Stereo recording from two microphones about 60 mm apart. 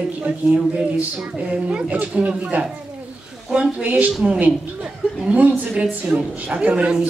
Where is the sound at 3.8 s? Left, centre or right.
Right.